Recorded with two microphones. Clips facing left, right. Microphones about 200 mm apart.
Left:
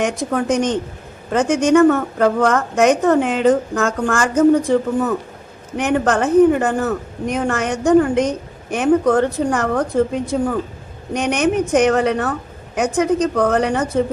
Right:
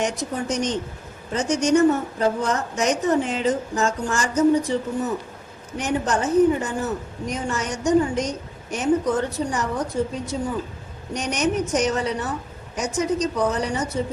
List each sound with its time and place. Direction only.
0.0 s a woman's voice: 55° left (ahead or behind)